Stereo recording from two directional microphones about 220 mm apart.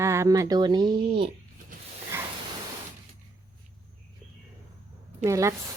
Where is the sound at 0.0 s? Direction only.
15° right (ahead or behind).